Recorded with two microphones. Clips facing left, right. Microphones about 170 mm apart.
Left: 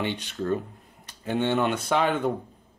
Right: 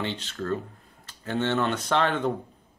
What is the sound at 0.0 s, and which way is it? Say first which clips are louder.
Speech: left 2 dB; 15° left (ahead or behind).